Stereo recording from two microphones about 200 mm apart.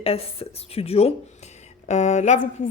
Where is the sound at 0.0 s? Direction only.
30° left (ahead or behind).